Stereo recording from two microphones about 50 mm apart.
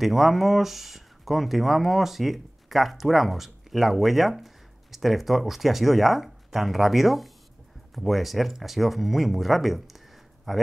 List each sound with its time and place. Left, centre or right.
0.0 s speech: centre